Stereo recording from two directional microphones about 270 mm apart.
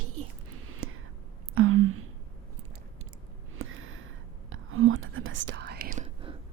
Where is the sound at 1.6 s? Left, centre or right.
Right.